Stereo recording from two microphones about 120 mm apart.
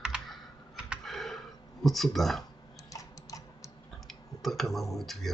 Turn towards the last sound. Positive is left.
turn(degrees=0)  # may be behind; listen again after turning